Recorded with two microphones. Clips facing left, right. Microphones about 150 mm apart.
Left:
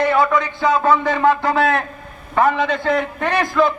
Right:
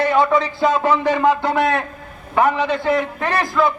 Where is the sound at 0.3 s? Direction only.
30° right (ahead or behind).